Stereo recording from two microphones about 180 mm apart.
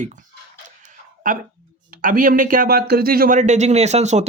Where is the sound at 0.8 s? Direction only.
45° right (ahead or behind).